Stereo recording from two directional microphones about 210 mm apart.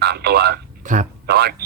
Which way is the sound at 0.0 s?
50° right (ahead or behind).